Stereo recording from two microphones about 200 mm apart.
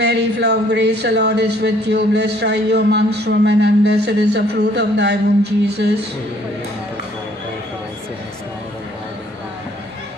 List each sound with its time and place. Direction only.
0.0 s speech: 55° right (ahead or behind)